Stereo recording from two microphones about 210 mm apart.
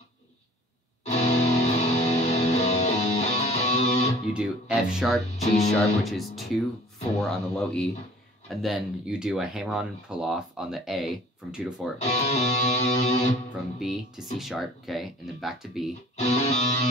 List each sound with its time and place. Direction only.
1.0 s music: 30° left (ahead or behind)
4.3 s speech: 5° right (ahead or behind)
12.0 s music: 30° left (ahead or behind)
13.7 s speech: centre (ahead or behind)
16.2 s music: 30° left (ahead or behind)